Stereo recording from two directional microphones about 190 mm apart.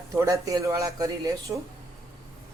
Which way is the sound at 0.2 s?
15° right (ahead or behind).